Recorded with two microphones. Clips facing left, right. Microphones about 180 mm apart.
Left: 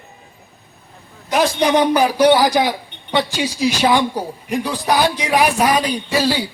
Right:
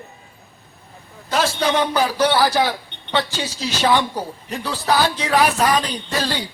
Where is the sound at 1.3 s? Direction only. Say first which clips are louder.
Left 4 dB; 15° left (ahead or behind).